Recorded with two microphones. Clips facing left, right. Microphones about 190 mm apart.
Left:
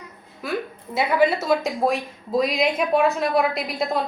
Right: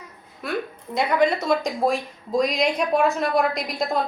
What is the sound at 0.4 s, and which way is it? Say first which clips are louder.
A woman's voice: even; centre (ahead or behind).